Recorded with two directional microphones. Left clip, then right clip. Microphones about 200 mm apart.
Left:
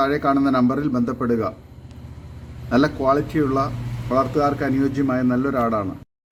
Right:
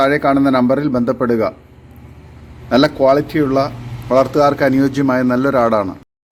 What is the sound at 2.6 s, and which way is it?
A man's voice, 5° right (ahead or behind).